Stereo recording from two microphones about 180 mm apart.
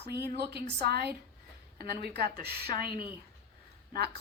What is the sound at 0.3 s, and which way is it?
Speech, 65° right (ahead or behind).